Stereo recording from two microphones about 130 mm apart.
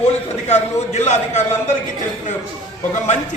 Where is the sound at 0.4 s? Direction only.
60° left (ahead or behind).